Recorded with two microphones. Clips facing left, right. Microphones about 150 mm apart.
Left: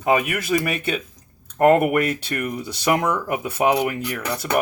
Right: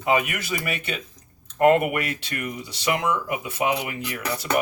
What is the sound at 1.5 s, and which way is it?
Speech, 45° left (ahead or behind).